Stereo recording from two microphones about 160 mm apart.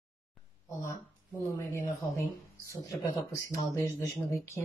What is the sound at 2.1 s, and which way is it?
Speech, 20° left (ahead or behind).